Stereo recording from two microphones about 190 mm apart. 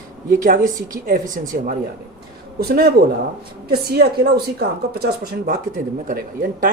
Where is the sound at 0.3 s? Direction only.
45° right (ahead or behind).